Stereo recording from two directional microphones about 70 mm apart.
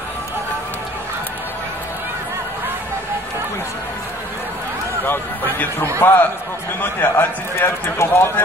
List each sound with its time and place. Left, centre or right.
5.0 s a man's voice: left